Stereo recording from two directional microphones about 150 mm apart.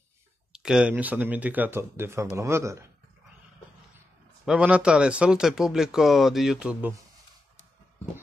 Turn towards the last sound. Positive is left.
turn(degrees=-5)  # may be behind; listen again after turning